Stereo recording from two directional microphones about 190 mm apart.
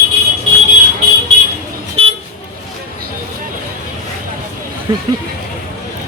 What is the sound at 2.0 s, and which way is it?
Vehicle, 30° right (ahead or behind).